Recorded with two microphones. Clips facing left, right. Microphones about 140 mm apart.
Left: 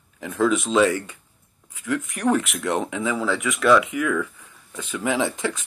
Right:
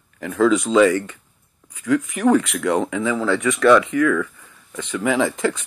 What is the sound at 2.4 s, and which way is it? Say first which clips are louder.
Speech: right 5 dB; 90° right.